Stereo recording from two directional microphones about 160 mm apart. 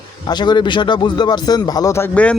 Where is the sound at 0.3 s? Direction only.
25° left (ahead or behind).